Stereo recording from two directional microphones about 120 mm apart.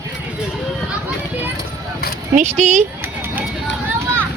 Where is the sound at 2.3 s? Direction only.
70° right (ahead or behind).